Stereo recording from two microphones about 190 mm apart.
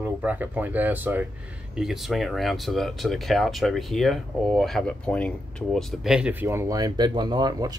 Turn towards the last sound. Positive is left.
turn(degrees=-20)  # may be behind; listen again after turning